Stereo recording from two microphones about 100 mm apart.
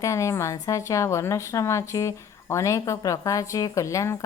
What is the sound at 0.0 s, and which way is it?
A woman's voice, 30° left (ahead or behind).